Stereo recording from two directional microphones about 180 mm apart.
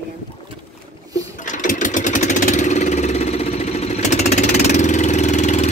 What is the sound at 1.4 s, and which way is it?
Engine, 45° left (ahead or behind).